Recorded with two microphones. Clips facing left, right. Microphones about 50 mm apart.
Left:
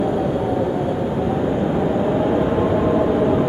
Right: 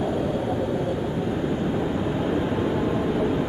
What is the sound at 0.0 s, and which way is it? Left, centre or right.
Vehicle, centre.